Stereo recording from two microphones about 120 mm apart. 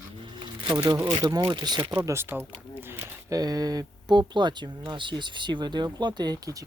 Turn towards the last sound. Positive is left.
turn(degrees=-30)  # may be behind; listen again after turning